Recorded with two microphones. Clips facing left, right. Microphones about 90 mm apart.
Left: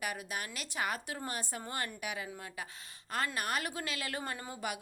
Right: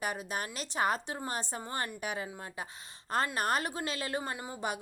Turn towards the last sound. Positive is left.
turn(degrees=-20)  # may be behind; listen again after turning